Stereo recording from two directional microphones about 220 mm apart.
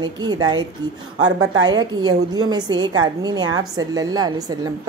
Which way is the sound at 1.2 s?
65° right (ahead or behind).